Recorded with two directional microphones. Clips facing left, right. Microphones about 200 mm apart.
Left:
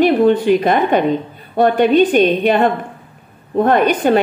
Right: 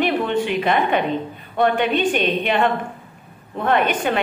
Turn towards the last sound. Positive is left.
turn(degrees=40)  # may be behind; listen again after turning